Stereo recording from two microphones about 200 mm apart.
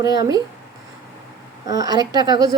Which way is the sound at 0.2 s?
20° right (ahead or behind).